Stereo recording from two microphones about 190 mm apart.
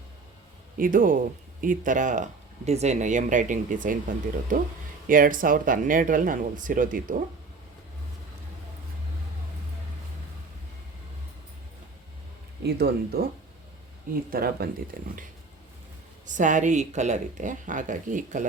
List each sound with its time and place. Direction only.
0.8 s speech: 45° right (ahead or behind)
12.6 s speech: 60° right (ahead or behind)
14.3 s speech: 50° right (ahead or behind)
16.2 s speech: 40° right (ahead or behind)